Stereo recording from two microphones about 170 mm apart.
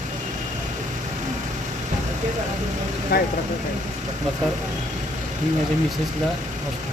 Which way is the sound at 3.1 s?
65° left (ahead or behind).